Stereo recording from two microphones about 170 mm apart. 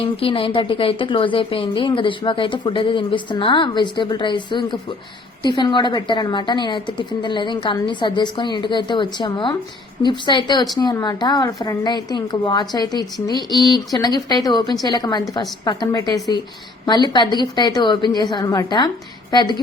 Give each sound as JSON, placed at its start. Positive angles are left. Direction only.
{"t": 0.0, "sound": "a woman's voice", "side_deg": 30}